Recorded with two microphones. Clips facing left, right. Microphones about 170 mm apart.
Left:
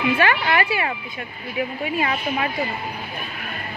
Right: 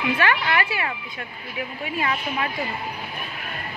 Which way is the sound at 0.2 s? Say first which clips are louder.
Left 3 dB; 15° left (ahead or behind).